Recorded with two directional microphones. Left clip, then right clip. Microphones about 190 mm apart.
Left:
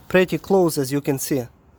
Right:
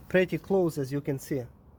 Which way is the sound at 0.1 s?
35° left (ahead or behind).